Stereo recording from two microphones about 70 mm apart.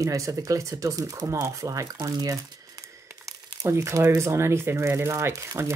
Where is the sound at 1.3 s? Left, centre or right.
Right.